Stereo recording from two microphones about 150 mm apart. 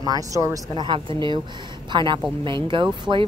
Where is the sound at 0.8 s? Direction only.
30° right (ahead or behind).